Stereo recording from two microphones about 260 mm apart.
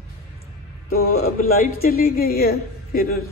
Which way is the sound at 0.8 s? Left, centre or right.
Left.